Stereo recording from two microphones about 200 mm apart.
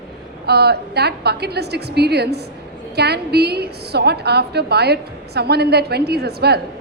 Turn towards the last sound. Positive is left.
turn(degrees=-55)  # may be behind; listen again after turning